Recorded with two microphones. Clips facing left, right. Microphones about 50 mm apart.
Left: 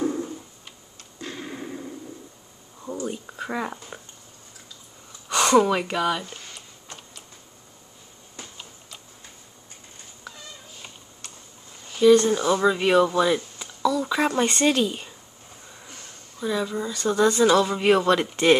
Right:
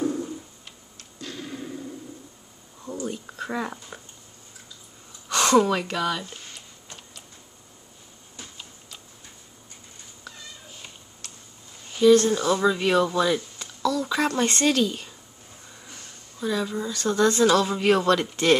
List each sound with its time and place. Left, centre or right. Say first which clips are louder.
0.0 s tick-tock: left 1 dB; left
1.2 s a sound: left 1 dB; left
2.8 s a sound: left 1 dB; centre
3.3 s speech: even; centre
5.3 s speech: left 1 dB; centre
10.8 s cat: left 1 dB; centre
12.0 s speech: left 1 dB; centre
16.3 s speech: left 1 dB; centre